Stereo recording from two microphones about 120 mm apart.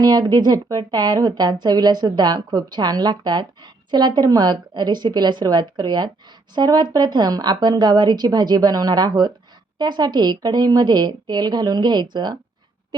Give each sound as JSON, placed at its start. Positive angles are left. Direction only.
{"t": 0.0, "sound": "a woman's voice", "side_deg": -35}